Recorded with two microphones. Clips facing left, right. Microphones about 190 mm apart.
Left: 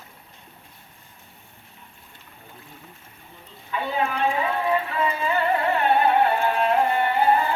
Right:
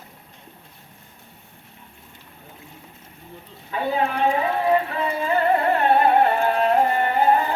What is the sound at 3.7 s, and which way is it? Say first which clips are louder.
Speech: right 3 dB; 40° right (ahead or behind).